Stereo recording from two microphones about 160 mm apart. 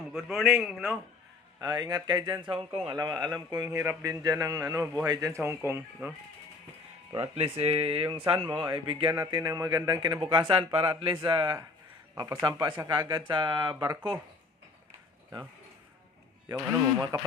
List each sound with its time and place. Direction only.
0.1 s a man's voice: centre (ahead or behind)
1.6 s speech: 25° right (ahead or behind)
7.1 s speech: 35° right (ahead or behind)
9.1 s speech: 20° right (ahead or behind)
16.5 s speech: 15° right (ahead or behind)